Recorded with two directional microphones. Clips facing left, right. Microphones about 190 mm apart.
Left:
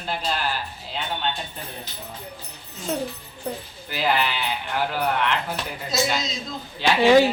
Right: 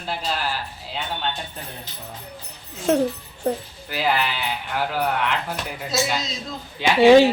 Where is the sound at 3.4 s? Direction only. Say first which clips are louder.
Right 7 dB; 50° right (ahead or behind).